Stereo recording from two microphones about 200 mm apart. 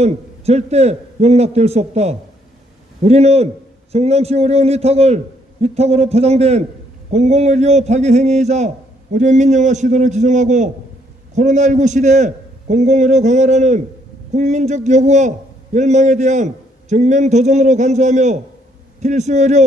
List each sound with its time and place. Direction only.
0.0 s a man's voice: 30° right (ahead or behind)